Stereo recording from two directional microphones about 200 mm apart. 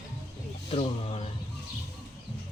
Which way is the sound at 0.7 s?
30° left (ahead or behind).